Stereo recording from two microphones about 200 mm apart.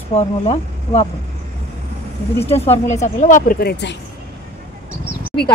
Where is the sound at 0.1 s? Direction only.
30° left (ahead or behind).